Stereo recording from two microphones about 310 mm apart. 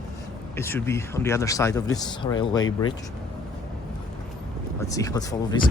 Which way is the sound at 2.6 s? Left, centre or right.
Left.